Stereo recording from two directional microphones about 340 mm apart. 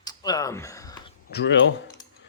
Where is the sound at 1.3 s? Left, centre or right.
Left.